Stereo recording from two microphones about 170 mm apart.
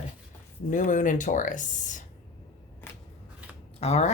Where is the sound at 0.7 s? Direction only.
50° left (ahead or behind).